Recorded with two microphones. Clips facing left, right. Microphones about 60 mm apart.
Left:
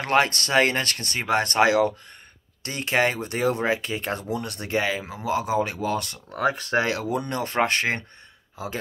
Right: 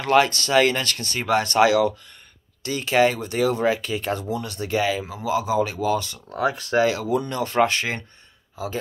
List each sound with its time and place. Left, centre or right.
0.0 s speech: left
6.3 s speech: left